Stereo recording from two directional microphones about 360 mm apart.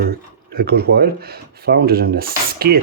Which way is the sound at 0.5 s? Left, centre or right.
Right.